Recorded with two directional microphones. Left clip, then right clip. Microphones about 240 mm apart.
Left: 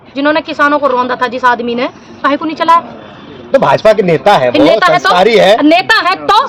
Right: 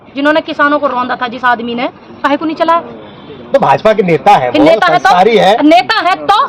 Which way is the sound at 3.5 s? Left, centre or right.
Left.